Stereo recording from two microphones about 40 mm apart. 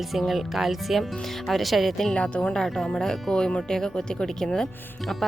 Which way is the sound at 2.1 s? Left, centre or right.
Left.